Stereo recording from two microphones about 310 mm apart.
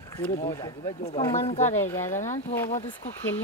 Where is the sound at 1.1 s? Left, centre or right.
Centre.